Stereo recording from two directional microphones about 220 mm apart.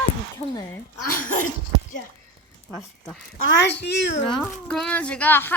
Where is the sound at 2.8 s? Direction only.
Centre (ahead or behind).